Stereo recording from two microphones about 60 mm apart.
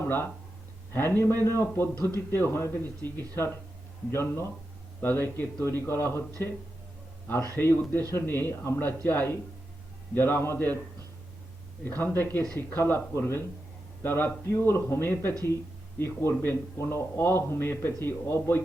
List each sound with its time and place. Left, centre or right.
0.0 s a man's voice: left
7.5 s a man's voice: left
11.9 s a man's voice: left